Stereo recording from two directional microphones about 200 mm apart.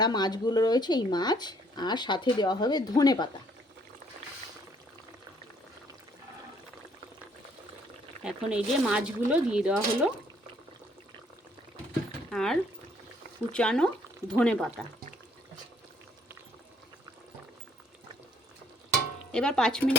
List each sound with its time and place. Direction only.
0.0 s speech: 20° left (ahead or behind)
8.2 s speech: 5° right (ahead or behind)
12.3 s speech: 5° left (ahead or behind)
19.3 s speech: 5° left (ahead or behind)